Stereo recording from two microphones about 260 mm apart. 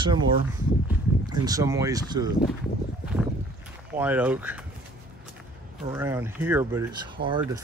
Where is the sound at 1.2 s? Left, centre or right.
Centre.